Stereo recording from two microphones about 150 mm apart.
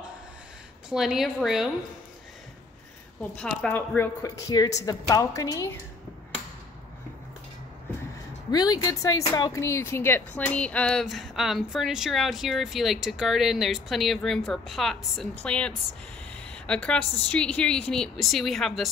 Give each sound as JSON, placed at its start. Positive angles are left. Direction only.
{"t": 0.8, "sound": "speech", "side_deg": 0}
{"t": 3.2, "sound": "a woman's voice", "side_deg": 5}
{"t": 8.5, "sound": "a woman's voice", "side_deg": 25}